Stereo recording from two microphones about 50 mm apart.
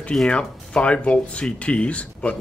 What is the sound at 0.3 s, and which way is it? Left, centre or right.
Speech, left.